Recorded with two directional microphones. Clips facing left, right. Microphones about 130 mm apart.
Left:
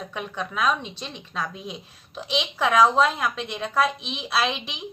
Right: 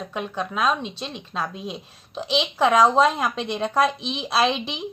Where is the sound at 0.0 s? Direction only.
25° right (ahead or behind).